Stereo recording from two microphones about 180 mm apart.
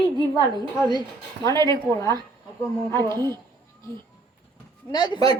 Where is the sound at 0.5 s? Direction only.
25° right (ahead or behind).